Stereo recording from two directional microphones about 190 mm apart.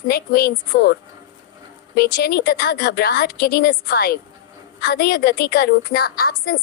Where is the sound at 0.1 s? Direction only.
55° left (ahead or behind).